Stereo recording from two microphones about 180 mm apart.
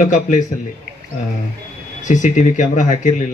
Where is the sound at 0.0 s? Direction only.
45° left (ahead or behind).